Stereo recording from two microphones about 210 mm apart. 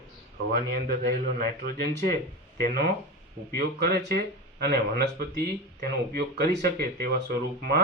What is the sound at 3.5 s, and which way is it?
Speech, 50° right (ahead or behind).